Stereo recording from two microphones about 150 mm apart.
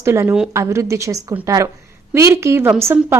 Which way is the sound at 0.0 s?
15° right (ahead or behind).